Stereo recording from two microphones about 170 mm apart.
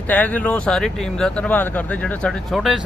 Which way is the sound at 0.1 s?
10° left (ahead or behind).